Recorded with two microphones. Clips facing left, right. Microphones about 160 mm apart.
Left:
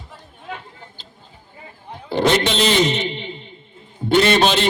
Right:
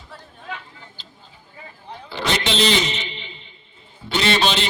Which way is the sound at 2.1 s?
50° left (ahead or behind).